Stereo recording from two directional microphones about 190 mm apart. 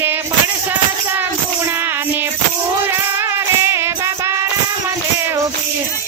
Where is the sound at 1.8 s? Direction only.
10° right (ahead or behind).